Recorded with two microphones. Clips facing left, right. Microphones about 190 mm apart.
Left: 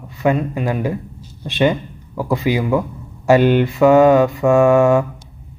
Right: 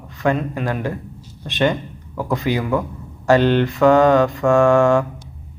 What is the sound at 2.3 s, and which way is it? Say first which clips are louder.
Mantra: left 3 dB; 15° left (ahead or behind).